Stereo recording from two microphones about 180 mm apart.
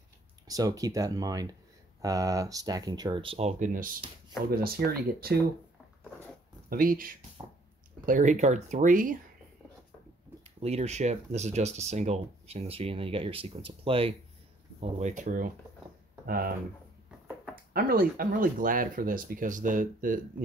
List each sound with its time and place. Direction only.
0.5 s speech: 20° right (ahead or behind); by 3.9 s 45° right (ahead or behind)
4.5 s speech: 55° right (ahead or behind)
6.7 s speech: 50° right (ahead or behind)
10.4 s speech: 35° right (ahead or behind); by 16.5 s 55° right (ahead or behind)
17.7 s speech: 55° right (ahead or behind)